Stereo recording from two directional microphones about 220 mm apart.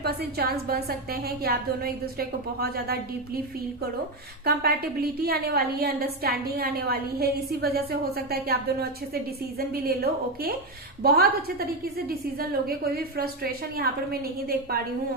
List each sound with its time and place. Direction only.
0.0 s a woman's voice: 45° right (ahead or behind)
4.4 s a woman's voice: 45° right (ahead or behind)